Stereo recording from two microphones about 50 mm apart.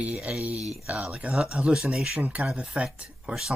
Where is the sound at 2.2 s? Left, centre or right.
Right.